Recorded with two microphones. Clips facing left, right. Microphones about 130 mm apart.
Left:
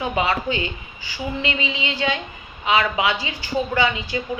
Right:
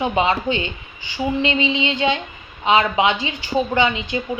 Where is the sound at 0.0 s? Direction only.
20° right (ahead or behind).